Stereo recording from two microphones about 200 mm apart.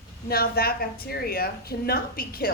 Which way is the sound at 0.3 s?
50° left (ahead or behind).